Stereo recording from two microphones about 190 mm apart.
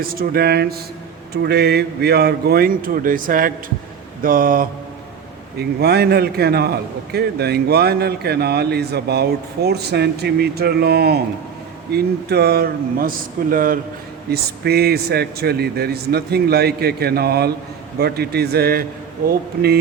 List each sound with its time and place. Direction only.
0.0 s a man's voice: 50° right (ahead or behind)
5.5 s a man's voice: 60° right (ahead or behind)